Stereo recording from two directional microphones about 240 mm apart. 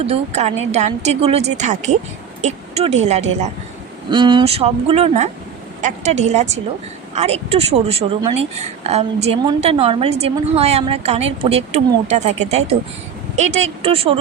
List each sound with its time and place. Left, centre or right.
0.0 s speech: right